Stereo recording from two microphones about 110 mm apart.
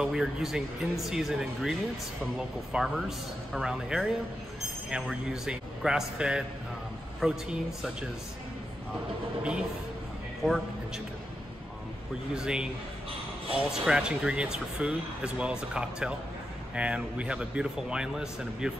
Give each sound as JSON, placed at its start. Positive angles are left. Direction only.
{"t": 0.0, "sound": "a man's voice", "side_deg": -5}
{"t": 9.4, "sound": "speech", "side_deg": -10}
{"t": 12.4, "sound": "speech", "side_deg": -5}
{"t": 13.7, "sound": "speech", "side_deg": -5}